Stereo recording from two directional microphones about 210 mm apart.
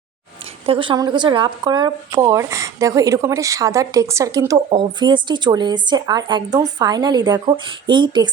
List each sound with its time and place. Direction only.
0.6 s speech: 25° right (ahead or behind)